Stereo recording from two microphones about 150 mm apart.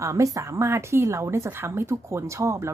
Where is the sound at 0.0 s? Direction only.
20° right (ahead or behind).